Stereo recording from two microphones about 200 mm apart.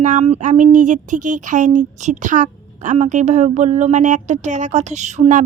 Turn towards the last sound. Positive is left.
turn(degrees=-35)  # may be behind; listen again after turning